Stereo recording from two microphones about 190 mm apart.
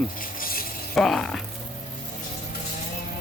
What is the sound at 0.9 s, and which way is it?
Speech, centre (ahead or behind).